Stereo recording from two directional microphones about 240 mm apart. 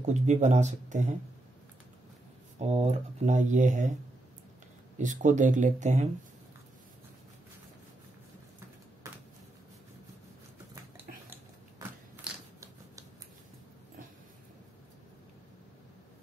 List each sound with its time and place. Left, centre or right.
0.0 s speech: right
2.6 s speech: right
4.9 s speech: right
9.0 s a sound: centre
12.2 s scissors: centre